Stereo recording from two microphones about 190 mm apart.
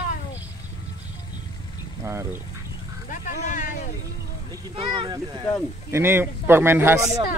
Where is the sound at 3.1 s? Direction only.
45° left (ahead or behind).